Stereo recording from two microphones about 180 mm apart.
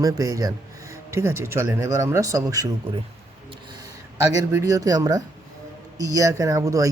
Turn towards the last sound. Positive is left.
turn(degrees=-15)  # may be behind; listen again after turning